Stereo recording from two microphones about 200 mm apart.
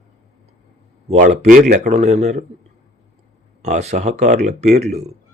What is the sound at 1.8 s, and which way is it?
Speech, 35° right (ahead or behind).